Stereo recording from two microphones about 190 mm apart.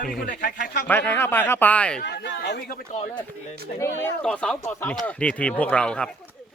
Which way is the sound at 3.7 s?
15° left (ahead or behind).